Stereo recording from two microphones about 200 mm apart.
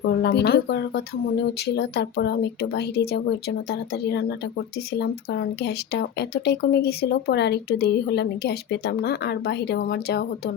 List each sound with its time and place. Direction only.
0.2 s speech: 55° left (ahead or behind)